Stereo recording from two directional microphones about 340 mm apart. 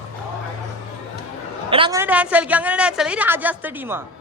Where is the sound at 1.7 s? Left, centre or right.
Centre.